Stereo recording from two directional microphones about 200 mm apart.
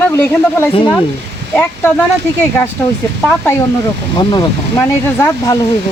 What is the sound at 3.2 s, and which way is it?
Speech, 10° left (ahead or behind).